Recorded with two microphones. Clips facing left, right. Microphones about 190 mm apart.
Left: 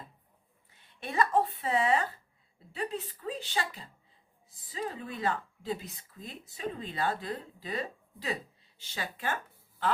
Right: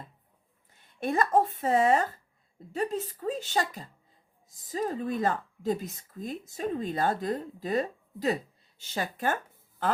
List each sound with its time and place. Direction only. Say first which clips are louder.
0.7 s speech: right 9 dB; 45° right (ahead or behind)